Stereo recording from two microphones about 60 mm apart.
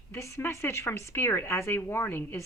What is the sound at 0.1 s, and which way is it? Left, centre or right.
A woman's voice, left.